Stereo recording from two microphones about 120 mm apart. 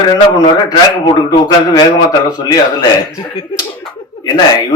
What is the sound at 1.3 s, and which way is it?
A man's voice, 40° left (ahead or behind).